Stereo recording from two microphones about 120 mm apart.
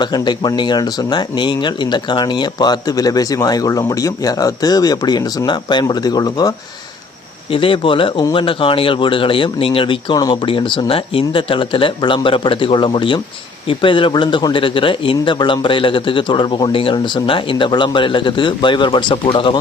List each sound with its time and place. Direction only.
0.0 s speech: 35° left (ahead or behind)
7.5 s a man's voice: 45° left (ahead or behind)